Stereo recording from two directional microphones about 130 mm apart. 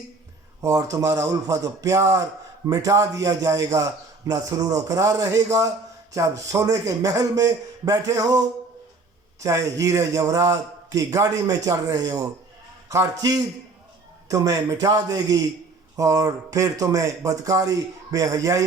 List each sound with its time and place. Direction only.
0.6 s a man's voice: 25° right (ahead or behind)